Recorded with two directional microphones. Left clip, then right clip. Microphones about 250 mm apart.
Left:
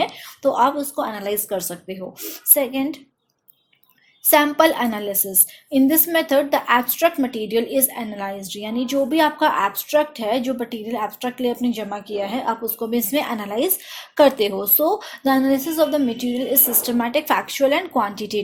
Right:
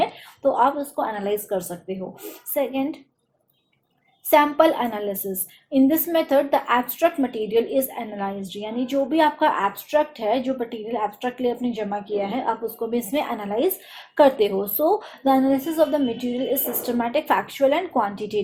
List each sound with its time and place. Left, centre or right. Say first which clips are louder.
0.0 s a woman's voice: left 1 dB; left
4.3 s a woman's voice: left 1 dB; left